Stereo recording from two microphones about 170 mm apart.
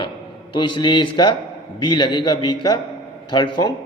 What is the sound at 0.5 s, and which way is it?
A man's voice, 25° left (ahead or behind).